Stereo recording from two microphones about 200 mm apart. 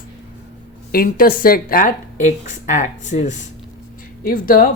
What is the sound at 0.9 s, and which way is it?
Speech, 45° left (ahead or behind).